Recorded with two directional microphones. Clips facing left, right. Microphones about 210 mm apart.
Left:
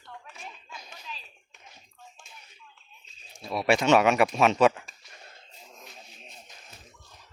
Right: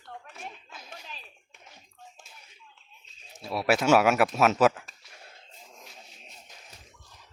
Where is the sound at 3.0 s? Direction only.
5° right (ahead or behind).